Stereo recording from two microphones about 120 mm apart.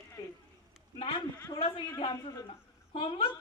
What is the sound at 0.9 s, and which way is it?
A woman's voice, 50° left (ahead or behind).